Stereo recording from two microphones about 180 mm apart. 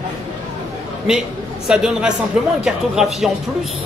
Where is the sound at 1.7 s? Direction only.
5° right (ahead or behind).